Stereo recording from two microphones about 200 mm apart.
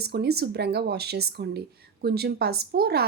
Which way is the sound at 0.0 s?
55° right (ahead or behind).